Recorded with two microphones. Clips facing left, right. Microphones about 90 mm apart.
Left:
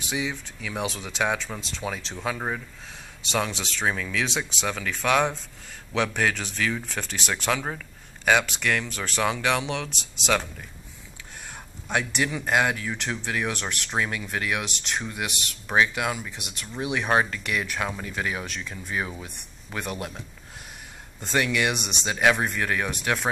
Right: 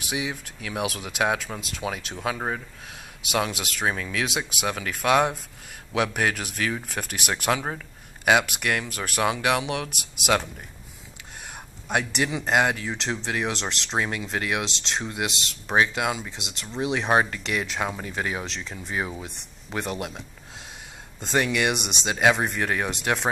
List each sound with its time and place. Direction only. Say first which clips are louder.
0.0 s speech: even; 15° right (ahead or behind)
11.9 s speech: right 1 dB; 20° right (ahead or behind)